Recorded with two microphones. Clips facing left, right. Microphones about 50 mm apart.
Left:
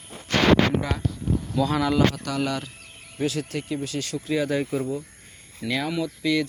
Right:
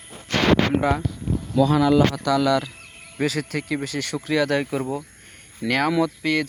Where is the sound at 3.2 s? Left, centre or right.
Right.